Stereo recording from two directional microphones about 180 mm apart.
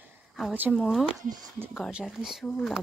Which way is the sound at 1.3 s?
20° right (ahead or behind).